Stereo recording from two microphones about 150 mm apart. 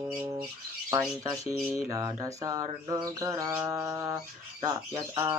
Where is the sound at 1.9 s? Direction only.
20° right (ahead or behind).